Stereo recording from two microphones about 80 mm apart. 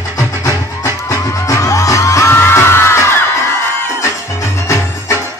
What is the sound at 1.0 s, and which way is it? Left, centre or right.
Music, left.